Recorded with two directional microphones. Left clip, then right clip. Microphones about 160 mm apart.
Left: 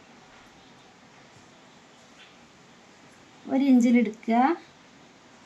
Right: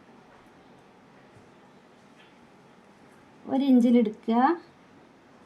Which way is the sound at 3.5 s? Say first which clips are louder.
Even; 20° right (ahead or behind).